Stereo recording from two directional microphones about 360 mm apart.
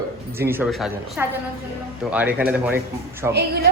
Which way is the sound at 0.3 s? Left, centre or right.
Centre.